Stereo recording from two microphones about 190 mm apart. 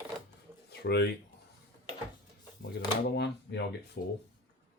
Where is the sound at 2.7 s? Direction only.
65° left (ahead or behind).